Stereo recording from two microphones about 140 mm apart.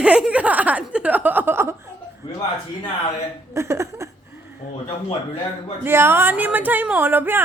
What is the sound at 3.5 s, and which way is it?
Speech, 20° right (ahead or behind).